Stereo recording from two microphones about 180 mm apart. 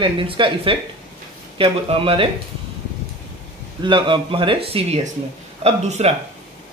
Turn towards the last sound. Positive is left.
turn(degrees=-35)  # may be behind; listen again after turning